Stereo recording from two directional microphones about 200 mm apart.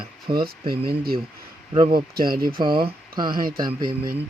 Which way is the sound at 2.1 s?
50° right (ahead or behind).